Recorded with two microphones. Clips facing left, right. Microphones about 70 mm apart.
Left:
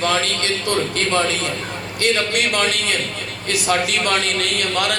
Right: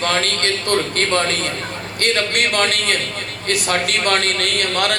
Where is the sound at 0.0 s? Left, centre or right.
Right.